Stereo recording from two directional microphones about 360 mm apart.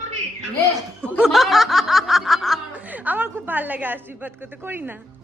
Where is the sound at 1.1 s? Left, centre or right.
Centre.